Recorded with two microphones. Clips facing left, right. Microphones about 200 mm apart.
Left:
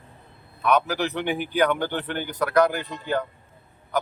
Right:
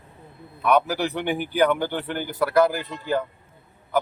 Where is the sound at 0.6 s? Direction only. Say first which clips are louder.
Right 1 dB; 10° right (ahead or behind).